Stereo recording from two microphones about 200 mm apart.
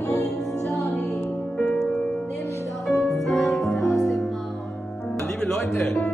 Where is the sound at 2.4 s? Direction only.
15° left (ahead or behind).